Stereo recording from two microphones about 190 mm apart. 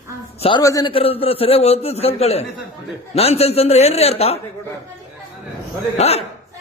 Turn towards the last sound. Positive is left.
turn(degrees=35)  # may be behind; listen again after turning